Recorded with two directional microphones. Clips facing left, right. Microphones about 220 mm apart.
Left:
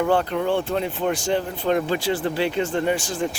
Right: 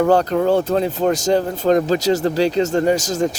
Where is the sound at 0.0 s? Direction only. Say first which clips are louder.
Right 6 dB; 40° right (ahead or behind).